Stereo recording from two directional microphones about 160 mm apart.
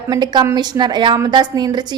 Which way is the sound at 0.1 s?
25° right (ahead or behind).